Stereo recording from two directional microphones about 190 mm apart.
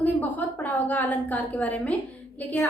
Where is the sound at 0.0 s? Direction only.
10° left (ahead or behind).